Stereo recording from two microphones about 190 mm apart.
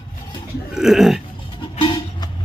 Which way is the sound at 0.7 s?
Centre (ahead or behind).